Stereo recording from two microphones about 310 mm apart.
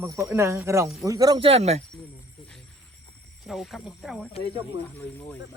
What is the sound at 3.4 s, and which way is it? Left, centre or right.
Speech, centre.